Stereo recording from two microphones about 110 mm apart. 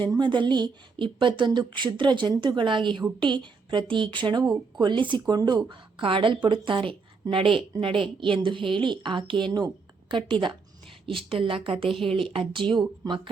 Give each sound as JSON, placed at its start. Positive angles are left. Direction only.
{"t": 0.1, "sound": "a woman's voice", "side_deg": -45}